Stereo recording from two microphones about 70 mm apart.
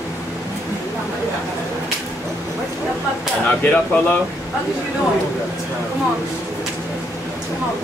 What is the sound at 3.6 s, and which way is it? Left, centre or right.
Speech, left.